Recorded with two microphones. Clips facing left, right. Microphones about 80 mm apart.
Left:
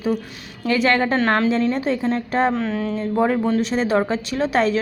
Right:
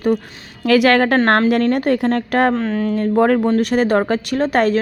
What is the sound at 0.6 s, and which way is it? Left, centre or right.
A woman's voice, right.